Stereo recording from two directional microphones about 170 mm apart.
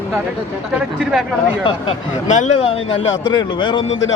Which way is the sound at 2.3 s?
45° left (ahead or behind).